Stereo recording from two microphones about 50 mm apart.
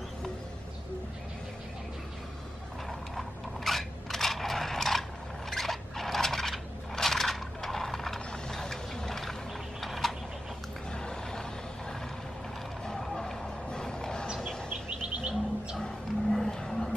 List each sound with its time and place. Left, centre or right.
3.2 s crushing: centre
5.5 s a sound: centre
10.9 s a sound: centre
12.8 s vehicle: centre
14.7 s bird: right
15.8 s music: centre